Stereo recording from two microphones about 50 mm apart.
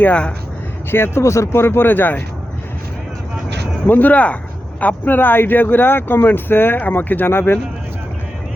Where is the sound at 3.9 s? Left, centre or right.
Left.